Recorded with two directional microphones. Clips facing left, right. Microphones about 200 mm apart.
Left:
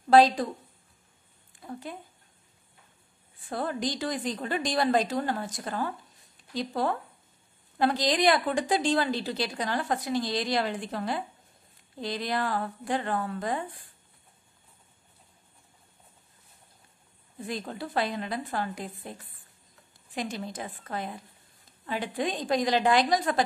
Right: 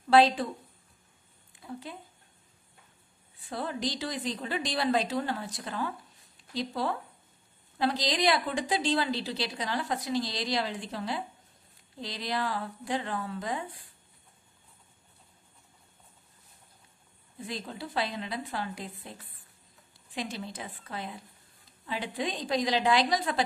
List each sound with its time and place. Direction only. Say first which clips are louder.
0.1 s a woman's voice: left 2 dB; 40° left (ahead or behind)
1.6 s speech: left 2 dB; 50° left (ahead or behind)
3.4 s a woman's voice: left 3 dB; 50° left (ahead or behind)
17.5 s a woman's voice: left 4 dB; 50° left (ahead or behind)
20.2 s a woman's voice: left 3 dB; 45° left (ahead or behind)